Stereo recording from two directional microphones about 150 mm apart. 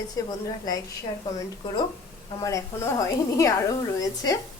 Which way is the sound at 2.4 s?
20° left (ahead or behind).